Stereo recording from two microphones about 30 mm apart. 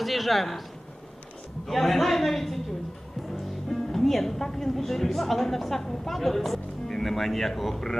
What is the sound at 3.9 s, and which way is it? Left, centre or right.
A woman's voice, centre.